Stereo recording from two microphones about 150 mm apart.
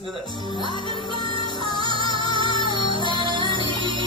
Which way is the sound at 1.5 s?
35° right (ahead or behind).